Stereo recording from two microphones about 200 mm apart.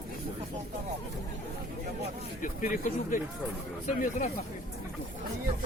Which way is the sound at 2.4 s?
40° left (ahead or behind).